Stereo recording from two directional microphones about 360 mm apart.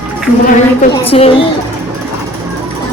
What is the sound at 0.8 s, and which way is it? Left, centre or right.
Speech, centre.